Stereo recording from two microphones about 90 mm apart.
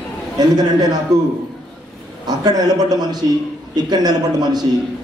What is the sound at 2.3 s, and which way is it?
A man's voice, 50° right (ahead or behind).